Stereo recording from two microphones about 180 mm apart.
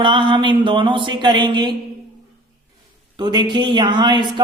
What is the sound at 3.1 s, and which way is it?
Speech, 25° right (ahead or behind).